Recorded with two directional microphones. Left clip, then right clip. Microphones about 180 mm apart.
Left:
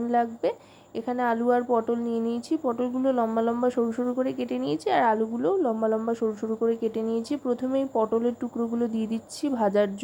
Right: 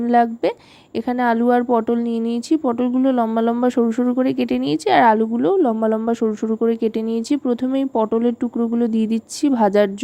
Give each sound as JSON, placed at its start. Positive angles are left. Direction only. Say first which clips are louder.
{"t": 0.1, "sound": "speech", "louder": "right 9 dB", "side_deg": -40}